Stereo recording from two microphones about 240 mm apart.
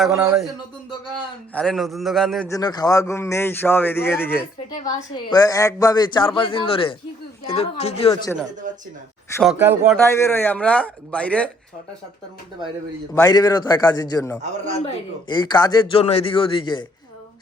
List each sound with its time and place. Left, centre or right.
0.0 s speech: centre
2.5 s a man's voice: centre
9.4 s speech: centre
10.0 s speech: centre
13.2 s speech: centre
14.4 s speech: right
15.3 s a man's voice: centre